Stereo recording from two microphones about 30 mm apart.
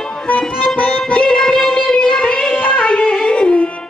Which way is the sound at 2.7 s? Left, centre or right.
Left.